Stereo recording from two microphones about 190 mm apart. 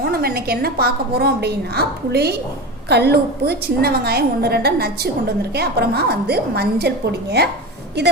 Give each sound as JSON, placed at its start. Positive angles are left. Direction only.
{"t": 0.0, "sound": "a woman's voice", "side_deg": -55}